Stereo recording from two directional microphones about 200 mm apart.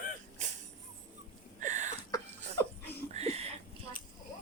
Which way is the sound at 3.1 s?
30° right (ahead or behind).